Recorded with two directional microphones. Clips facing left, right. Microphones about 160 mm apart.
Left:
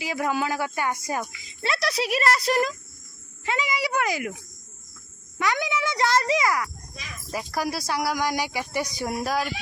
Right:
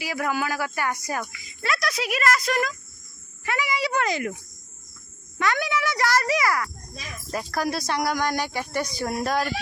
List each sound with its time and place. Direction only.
0.0 s speech: 20° left (ahead or behind)
3.4 s speech: 20° left (ahead or behind)
5.4 s speech: 15° left (ahead or behind)